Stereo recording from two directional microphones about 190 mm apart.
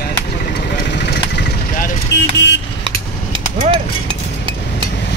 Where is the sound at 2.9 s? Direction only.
25° right (ahead or behind).